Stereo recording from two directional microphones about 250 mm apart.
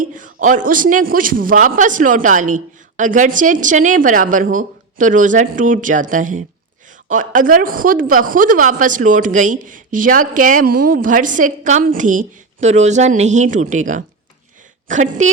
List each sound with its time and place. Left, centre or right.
0.0 s a woman's voice: right